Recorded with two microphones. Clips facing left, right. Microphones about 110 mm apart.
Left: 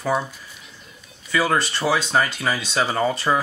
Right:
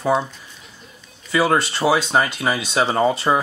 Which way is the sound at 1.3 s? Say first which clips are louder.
Right 3 dB; 20° right (ahead or behind).